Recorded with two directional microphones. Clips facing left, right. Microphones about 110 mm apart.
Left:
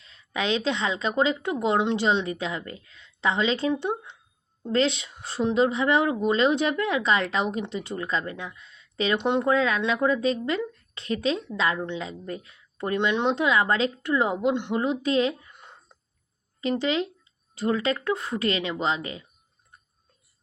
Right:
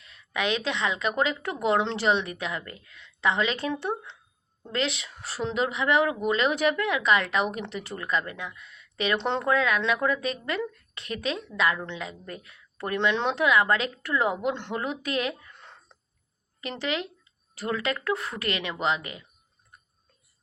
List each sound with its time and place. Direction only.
0.0 s speech: 30° left (ahead or behind)
4.7 s speech: 30° left (ahead or behind)
5.1 s speech: 20° left (ahead or behind)
9.1 s speech: 15° left (ahead or behind)
9.5 s speech: 25° left (ahead or behind)